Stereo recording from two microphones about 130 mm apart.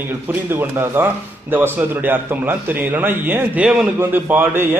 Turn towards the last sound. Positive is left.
turn(degrees=-15)  # may be behind; listen again after turning